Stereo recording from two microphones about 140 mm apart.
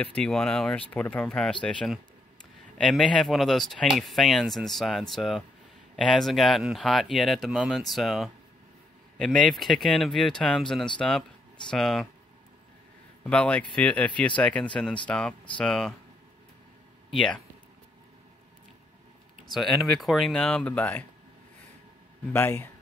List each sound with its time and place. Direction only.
0.0 s speech: 5° left (ahead or behind)
13.2 s speech: 10° left (ahead or behind)
17.1 s speech: 5° left (ahead or behind)
19.5 s speech: centre (ahead or behind)
22.3 s speech: 15° left (ahead or behind)